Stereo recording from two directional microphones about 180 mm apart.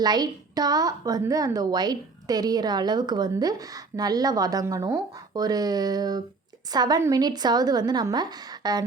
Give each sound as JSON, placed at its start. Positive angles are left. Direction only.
{"t": 0.0, "sound": "a woman's voice", "side_deg": -20}